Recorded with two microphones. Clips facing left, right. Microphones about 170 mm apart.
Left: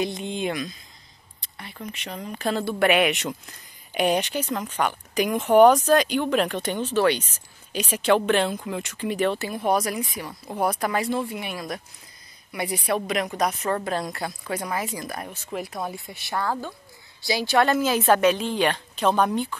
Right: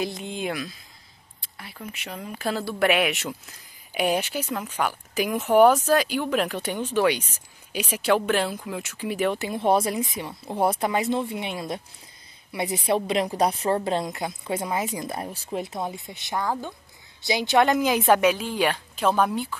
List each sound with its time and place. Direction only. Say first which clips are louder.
0.0 s a woman's voice: left 2 dB; centre (ahead or behind)